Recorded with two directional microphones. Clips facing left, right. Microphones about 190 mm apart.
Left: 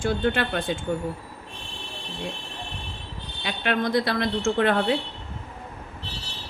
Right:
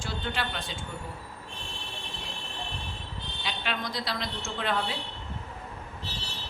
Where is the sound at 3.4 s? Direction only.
55° left (ahead or behind).